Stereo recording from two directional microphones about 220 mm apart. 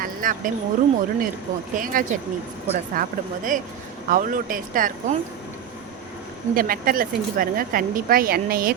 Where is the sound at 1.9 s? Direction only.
40° right (ahead or behind).